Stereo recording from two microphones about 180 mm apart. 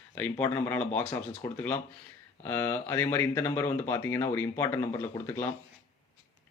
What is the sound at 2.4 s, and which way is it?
Speech, 10° left (ahead or behind).